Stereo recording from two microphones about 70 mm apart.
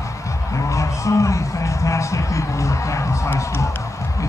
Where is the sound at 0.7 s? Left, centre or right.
Left.